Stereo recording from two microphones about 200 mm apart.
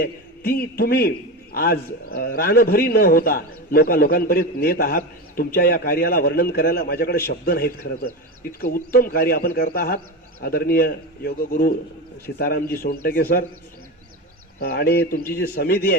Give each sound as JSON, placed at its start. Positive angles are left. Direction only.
{"t": 0.0, "sound": "a man's voice", "side_deg": 50}
{"t": 14.6, "sound": "a man's voice", "side_deg": 50}